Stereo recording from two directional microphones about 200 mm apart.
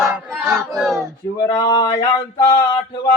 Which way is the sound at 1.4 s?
20° left (ahead or behind).